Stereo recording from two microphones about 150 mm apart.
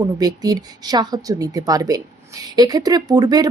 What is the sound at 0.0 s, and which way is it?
Speech, 25° right (ahead or behind).